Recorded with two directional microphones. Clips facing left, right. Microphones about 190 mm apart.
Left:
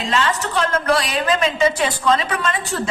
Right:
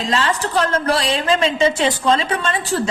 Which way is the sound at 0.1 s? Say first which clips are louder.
Right 1 dB; 30° right (ahead or behind).